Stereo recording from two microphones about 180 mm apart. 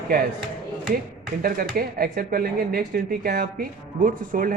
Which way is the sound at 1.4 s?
55° right (ahead or behind).